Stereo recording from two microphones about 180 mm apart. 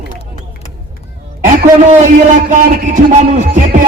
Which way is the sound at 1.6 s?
45° right (ahead or behind).